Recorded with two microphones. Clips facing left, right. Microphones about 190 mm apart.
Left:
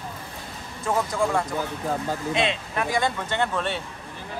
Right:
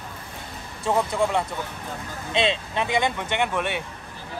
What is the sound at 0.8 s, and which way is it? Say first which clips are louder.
Speech: right 2 dB; 25° right (ahead or behind).